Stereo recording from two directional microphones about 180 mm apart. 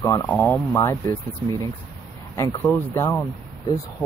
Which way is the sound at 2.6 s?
10° left (ahead or behind).